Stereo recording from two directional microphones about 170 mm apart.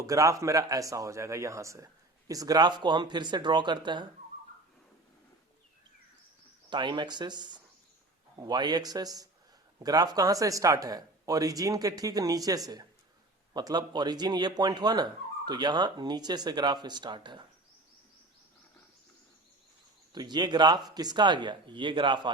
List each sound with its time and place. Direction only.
0.0 s speech: 20° right (ahead or behind)
6.7 s speech: 25° right (ahead or behind)
20.1 s speech: 25° right (ahead or behind)